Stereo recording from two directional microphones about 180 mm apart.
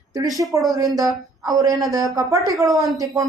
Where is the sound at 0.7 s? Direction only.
20° right (ahead or behind).